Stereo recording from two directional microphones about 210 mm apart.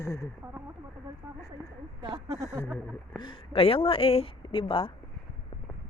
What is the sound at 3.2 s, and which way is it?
Speech, 20° left (ahead or behind).